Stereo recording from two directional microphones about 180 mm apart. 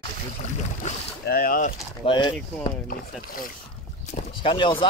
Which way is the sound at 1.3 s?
55° left (ahead or behind).